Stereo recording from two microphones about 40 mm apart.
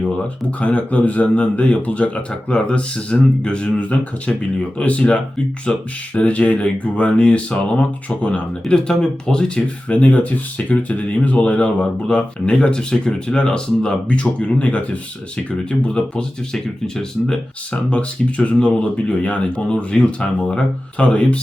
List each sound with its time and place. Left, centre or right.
0.6 s speech: left
6.1 s speech: left
8.6 s speech: centre
9.9 s speech: left; by 17.4 s centre
17.7 s speech: left